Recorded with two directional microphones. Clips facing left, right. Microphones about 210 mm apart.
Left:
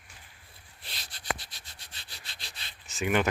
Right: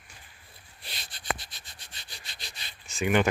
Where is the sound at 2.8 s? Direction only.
Centre (ahead or behind).